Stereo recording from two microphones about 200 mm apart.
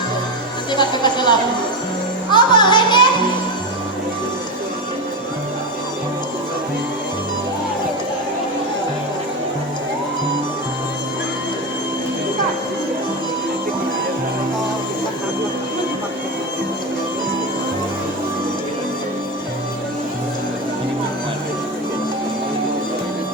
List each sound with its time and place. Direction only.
0.7 s music: 20° left (ahead or behind)
2.3 s music: 20° left (ahead or behind)